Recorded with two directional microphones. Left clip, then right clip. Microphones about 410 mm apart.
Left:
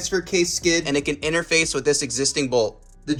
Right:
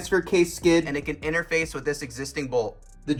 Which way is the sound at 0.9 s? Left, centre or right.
Centre.